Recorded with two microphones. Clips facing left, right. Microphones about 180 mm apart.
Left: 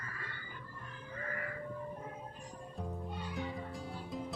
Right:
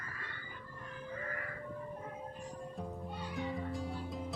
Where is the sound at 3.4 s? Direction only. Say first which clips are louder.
Right 5 dB; centre (ahead or behind).